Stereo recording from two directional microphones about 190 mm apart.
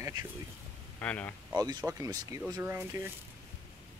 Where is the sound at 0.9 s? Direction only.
10° left (ahead or behind).